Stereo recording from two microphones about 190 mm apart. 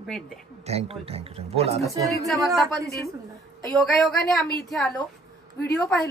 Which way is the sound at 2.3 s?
Centre (ahead or behind).